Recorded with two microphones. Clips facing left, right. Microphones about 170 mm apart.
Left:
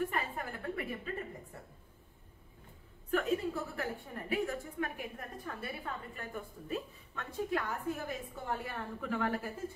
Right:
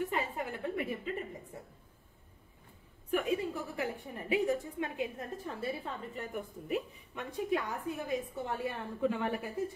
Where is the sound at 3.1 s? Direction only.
15° right (ahead or behind).